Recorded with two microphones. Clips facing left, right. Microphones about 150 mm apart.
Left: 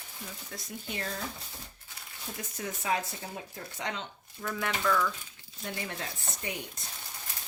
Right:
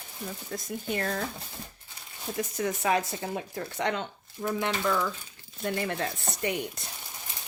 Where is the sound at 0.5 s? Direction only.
55° right (ahead or behind).